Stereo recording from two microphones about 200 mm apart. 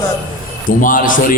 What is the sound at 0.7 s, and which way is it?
Speech, 40° left (ahead or behind).